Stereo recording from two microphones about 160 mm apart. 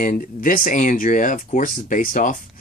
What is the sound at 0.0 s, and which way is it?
Speech, 60° left (ahead or behind).